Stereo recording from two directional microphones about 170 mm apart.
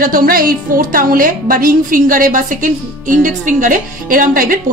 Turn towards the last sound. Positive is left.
turn(degrees=-55)  # may be behind; listen again after turning